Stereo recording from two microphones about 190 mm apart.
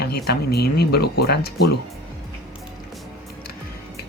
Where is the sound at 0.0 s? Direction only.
60° left (ahead or behind).